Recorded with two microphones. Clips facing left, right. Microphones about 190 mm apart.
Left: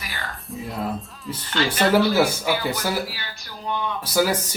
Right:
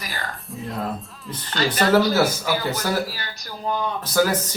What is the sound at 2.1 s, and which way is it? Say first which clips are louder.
Speech: even; 10° left (ahead or behind).